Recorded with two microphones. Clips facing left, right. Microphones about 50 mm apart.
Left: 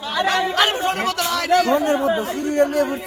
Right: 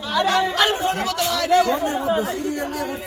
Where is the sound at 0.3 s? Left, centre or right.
Left.